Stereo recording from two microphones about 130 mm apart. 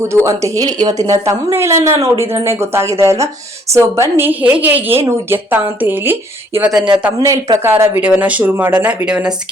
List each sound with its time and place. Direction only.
0.3 s a woman's voice: 25° right (ahead or behind); by 9.3 s 10° right (ahead or behind)